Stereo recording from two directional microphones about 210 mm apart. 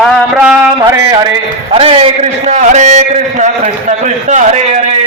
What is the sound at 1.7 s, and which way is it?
A man's voice, 25° right (ahead or behind).